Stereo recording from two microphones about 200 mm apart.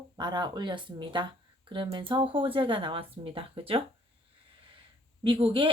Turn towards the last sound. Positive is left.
turn(degrees=-25)  # may be behind; listen again after turning